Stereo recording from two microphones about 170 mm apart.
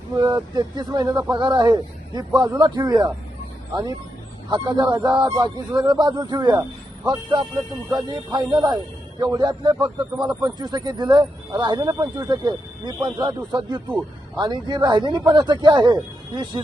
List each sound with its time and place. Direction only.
0.2 s speech: 25° right (ahead or behind)
4.4 s speech: 25° right (ahead or behind)